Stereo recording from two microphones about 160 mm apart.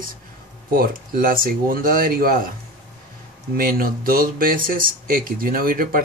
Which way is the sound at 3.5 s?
65° right (ahead or behind).